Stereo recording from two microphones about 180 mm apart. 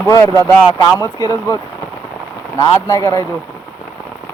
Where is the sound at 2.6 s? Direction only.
15° left (ahead or behind).